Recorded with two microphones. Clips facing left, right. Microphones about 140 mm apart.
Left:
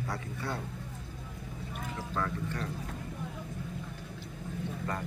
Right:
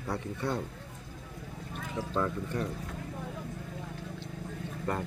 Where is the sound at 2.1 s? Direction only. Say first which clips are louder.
Right 3 dB; 25° right (ahead or behind).